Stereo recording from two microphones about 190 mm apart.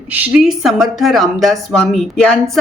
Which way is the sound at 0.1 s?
5° right (ahead or behind).